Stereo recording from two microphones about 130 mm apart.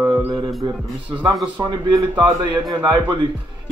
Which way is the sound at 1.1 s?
35° right (ahead or behind).